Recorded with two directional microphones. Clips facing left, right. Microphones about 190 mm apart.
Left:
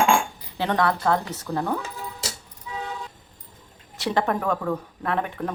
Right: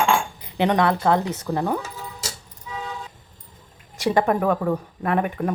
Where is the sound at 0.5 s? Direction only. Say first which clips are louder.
Right 4 dB; 20° right (ahead or behind).